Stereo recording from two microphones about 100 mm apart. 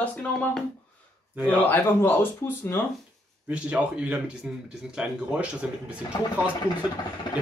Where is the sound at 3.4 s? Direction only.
10° right (ahead or behind).